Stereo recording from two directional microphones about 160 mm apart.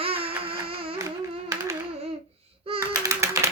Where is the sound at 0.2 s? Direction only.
35° right (ahead or behind).